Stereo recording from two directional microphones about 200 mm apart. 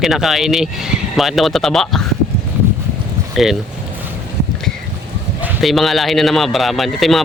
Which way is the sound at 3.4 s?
Centre (ahead or behind).